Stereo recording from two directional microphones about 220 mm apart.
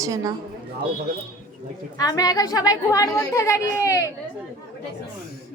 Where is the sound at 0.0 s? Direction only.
15° right (ahead or behind).